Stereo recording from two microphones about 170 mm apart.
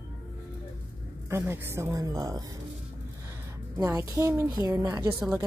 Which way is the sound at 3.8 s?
15° right (ahead or behind).